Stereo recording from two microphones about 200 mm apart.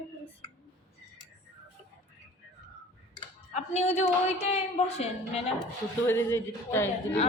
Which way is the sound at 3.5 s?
35° left (ahead or behind).